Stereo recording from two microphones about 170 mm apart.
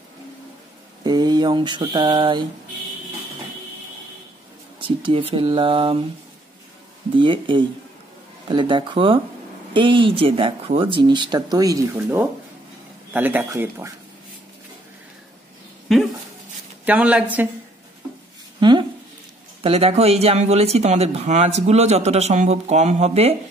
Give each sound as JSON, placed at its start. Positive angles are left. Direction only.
{"t": 1.0, "sound": "speech", "side_deg": -25}
{"t": 4.7, "sound": "speech", "side_deg": -30}
{"t": 7.2, "sound": "speech", "side_deg": -30}
{"t": 15.9, "sound": "speech", "side_deg": 0}
{"t": 18.6, "sound": "a sound", "side_deg": -25}
{"t": 19.6, "sound": "speech", "side_deg": -35}